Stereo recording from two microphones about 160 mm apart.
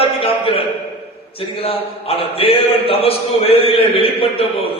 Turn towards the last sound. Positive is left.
turn(degrees=35)  # may be behind; listen again after turning